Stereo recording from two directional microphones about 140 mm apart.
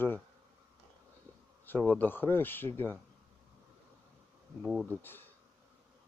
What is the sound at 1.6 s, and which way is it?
Speech, 15° left (ahead or behind).